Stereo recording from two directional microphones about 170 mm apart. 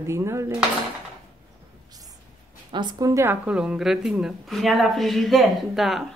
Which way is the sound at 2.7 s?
25° right (ahead or behind).